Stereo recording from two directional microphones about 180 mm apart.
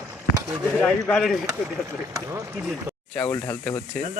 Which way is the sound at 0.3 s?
10° right (ahead or behind).